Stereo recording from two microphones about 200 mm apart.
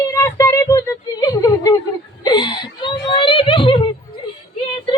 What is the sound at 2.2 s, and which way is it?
Whimper, 20° left (ahead or behind).